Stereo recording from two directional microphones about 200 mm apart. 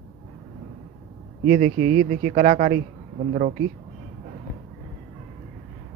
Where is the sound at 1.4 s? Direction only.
40° right (ahead or behind).